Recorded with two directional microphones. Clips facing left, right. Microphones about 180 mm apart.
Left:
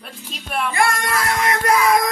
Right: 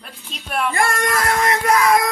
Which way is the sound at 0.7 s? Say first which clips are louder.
Left 1 dB; 45° right (ahead or behind).